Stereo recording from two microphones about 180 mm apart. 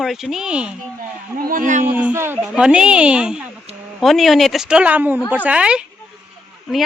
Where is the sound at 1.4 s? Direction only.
50° right (ahead or behind).